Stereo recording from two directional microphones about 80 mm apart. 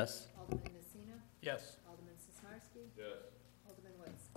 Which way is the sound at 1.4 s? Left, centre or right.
Right.